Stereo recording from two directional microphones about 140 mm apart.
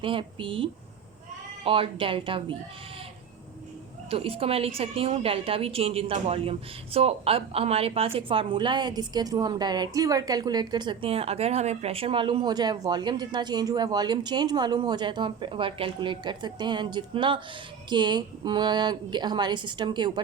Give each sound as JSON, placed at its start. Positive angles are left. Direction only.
{"t": 0.0, "sound": "a woman's voice", "side_deg": -40}
{"t": 4.1, "sound": "a woman's voice", "side_deg": -40}